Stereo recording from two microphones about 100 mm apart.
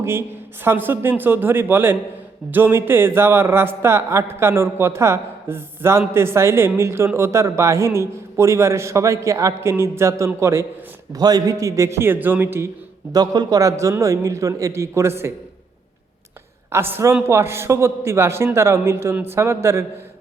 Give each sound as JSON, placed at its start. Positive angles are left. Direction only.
{"t": 0.0, "sound": "a man's voice", "side_deg": -25}
{"t": 11.1, "sound": "a man's voice", "side_deg": -40}
{"t": 13.1, "sound": "a man's voice", "side_deg": -40}
{"t": 16.7, "sound": "a man's voice", "side_deg": -25}